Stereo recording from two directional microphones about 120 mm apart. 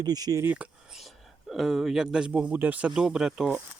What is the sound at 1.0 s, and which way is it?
Speech, centre (ahead or behind).